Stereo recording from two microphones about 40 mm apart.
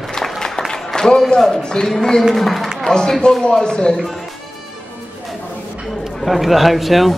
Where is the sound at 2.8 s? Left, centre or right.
Centre.